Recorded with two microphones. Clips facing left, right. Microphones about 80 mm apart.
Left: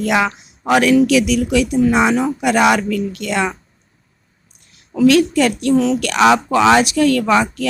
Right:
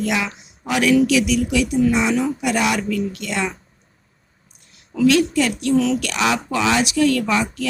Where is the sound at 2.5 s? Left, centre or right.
Left.